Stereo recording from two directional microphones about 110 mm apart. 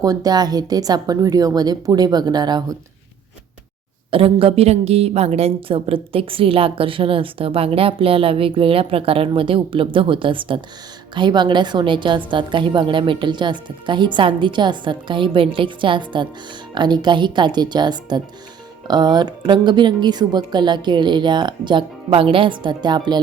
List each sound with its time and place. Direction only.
0.0 s a woman's voice: 35° right (ahead or behind)
4.1 s a woman's voice: 55° right (ahead or behind)
22.1 s a woman's voice: 55° right (ahead or behind)